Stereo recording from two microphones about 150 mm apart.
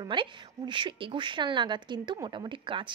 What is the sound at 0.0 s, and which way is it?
A woman's voice, 30° right (ahead or behind).